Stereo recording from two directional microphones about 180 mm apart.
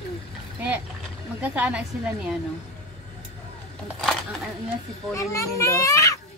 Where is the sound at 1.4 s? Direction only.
5° right (ahead or behind).